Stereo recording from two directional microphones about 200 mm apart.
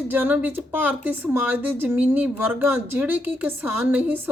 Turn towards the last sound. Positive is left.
turn(degrees=-10)  # may be behind; listen again after turning